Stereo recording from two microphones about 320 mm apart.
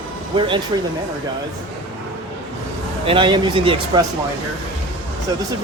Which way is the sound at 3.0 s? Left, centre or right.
Centre.